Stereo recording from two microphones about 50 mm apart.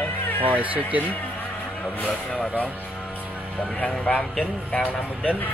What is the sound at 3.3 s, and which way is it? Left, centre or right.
Music, right.